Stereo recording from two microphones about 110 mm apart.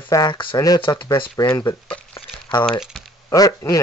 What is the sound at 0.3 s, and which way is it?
Speech, 50° left (ahead or behind).